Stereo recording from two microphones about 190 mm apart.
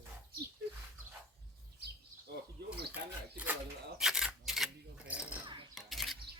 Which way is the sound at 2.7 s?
60° right (ahead or behind).